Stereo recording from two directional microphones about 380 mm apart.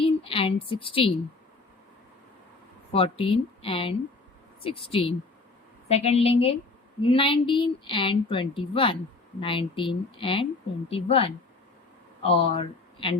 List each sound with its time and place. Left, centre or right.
0.0 s speech: centre
2.9 s a woman's voice: centre